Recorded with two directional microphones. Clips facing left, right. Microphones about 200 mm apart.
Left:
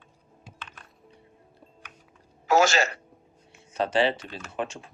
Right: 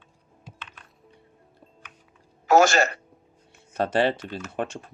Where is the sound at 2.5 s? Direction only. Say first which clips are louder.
Right 3 dB; 55° right (ahead or behind).